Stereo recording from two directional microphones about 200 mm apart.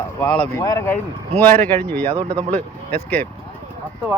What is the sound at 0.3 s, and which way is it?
Speech, 20° left (ahead or behind).